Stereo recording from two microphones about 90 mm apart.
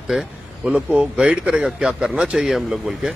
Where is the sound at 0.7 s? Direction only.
15° right (ahead or behind).